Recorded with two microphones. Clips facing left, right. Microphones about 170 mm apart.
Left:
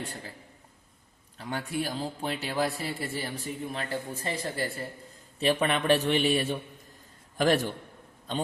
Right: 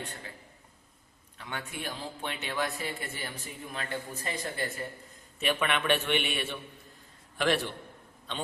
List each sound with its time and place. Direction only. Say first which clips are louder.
1.4 s a man's voice: left 7 dB; 35° left (ahead or behind)